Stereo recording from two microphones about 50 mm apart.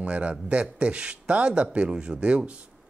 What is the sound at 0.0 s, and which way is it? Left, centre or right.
A man's voice, right.